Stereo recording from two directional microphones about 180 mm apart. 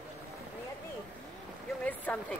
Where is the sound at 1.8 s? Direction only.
10° left (ahead or behind).